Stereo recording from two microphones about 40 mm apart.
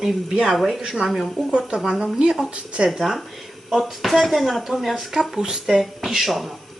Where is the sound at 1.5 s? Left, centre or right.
Right.